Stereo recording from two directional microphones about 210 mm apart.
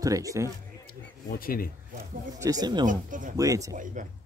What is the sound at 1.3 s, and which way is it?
Speech, 45° left (ahead or behind).